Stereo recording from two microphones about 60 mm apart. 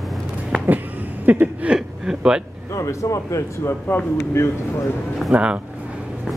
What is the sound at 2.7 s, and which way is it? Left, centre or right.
A man's voice, left.